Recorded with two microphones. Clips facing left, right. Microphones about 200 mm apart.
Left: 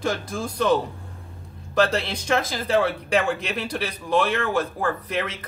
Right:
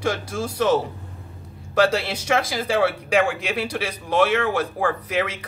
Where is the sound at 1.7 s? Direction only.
10° right (ahead or behind).